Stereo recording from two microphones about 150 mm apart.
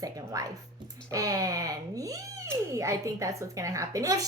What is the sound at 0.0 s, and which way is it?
Music, 25° right (ahead or behind).